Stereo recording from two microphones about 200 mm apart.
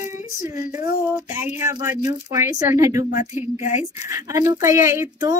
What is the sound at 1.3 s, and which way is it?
A woman's voice, 15° right (ahead or behind).